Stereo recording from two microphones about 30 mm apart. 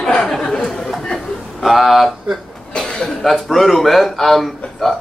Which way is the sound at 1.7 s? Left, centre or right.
Centre.